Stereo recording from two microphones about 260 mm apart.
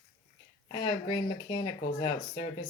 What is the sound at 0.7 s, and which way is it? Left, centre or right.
Speech, centre.